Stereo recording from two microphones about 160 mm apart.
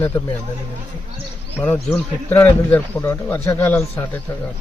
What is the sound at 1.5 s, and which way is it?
Speech, 10° left (ahead or behind).